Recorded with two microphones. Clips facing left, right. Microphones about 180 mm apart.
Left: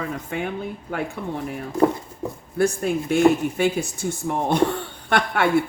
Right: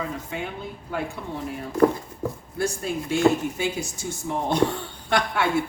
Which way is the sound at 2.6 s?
55° left (ahead or behind).